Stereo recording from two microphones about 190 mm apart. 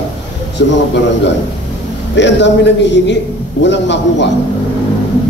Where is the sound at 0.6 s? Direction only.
70° left (ahead or behind).